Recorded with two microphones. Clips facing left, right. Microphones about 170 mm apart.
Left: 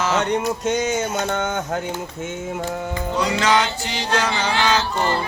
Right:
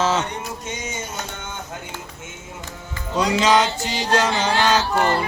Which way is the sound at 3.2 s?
20° right (ahead or behind).